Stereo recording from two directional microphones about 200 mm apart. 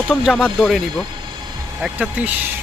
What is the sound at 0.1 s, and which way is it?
Speech, centre (ahead or behind).